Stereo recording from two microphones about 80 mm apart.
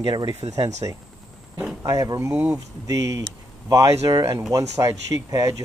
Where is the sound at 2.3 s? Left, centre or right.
Right.